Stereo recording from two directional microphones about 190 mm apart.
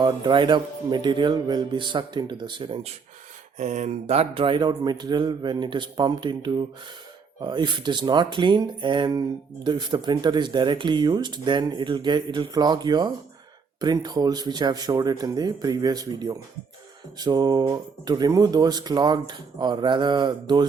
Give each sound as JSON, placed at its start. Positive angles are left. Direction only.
{"t": 0.0, "sound": "speech", "side_deg": -25}
{"t": 3.6, "sound": "speech", "side_deg": -40}